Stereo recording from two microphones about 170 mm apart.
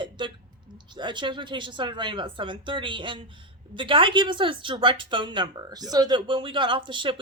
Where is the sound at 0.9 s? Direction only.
25° right (ahead or behind).